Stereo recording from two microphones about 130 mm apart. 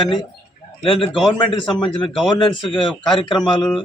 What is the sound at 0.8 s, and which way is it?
A man's voice, 45° left (ahead or behind).